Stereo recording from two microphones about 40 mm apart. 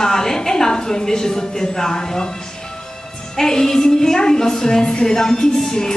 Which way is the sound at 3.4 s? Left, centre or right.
Centre.